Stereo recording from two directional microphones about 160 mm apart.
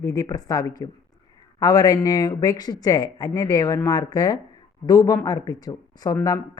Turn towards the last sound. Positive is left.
turn(degrees=25)  # may be behind; listen again after turning